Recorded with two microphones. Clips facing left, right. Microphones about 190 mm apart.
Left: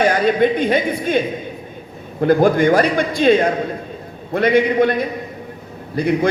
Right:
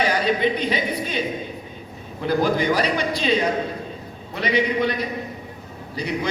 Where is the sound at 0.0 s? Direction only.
50° left (ahead or behind).